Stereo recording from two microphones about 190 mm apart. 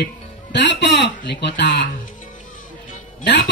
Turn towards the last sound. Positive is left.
turn(degrees=65)  # may be behind; listen again after turning